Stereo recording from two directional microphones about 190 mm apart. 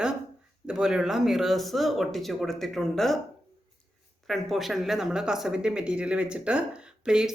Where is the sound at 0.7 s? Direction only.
5° right (ahead or behind).